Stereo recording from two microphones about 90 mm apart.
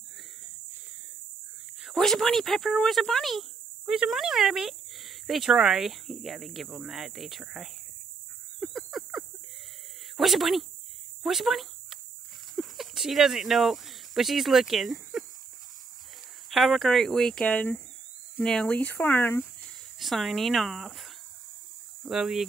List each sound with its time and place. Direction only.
1.9 s speech: 5° left (ahead or behind)
8.5 s a sound: centre (ahead or behind)
10.1 s cricket: centre (ahead or behind)
11.2 s speech: centre (ahead or behind)
16.4 s speech: centre (ahead or behind)
17.5 s speech: 15° left (ahead or behind)
19.6 s speech: centre (ahead or behind)